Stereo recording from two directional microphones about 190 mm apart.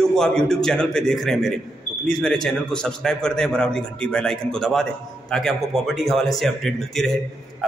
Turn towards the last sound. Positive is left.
turn(degrees=0)  # may be behind; listen again after turning